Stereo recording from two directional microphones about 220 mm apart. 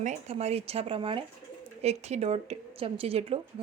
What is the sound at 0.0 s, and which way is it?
Speech, 30° right (ahead or behind).